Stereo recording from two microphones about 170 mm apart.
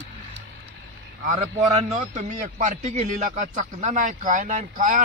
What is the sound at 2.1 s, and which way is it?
A man's voice, 45° right (ahead or behind).